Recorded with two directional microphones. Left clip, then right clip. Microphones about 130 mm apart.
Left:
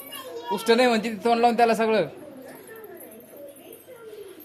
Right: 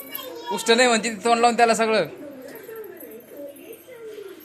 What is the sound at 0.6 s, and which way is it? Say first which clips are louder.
Speech: right 2 dB; 15° left (ahead or behind).